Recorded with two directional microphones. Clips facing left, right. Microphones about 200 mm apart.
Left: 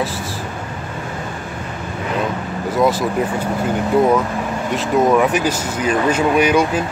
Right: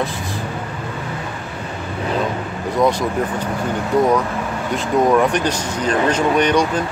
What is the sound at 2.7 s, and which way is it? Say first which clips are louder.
Speech: left 1 dB; 5° left (ahead or behind).